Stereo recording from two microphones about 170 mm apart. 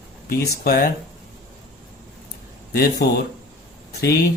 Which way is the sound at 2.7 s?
65° left (ahead or behind).